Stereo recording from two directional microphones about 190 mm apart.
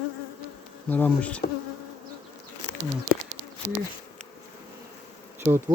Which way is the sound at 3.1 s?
40° right (ahead or behind).